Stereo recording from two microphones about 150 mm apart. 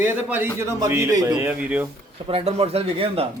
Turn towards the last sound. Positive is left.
turn(degrees=-40)  # may be behind; listen again after turning